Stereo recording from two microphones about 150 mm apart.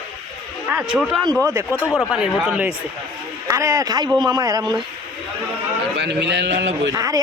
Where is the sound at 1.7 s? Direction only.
15° right (ahead or behind).